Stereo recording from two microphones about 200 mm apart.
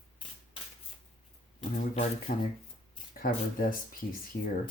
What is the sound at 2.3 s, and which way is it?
Speech, 45° left (ahead or behind).